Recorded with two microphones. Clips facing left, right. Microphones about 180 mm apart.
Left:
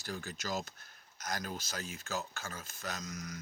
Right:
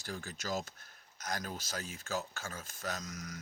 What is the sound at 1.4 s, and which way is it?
Speech, 45° right (ahead or behind).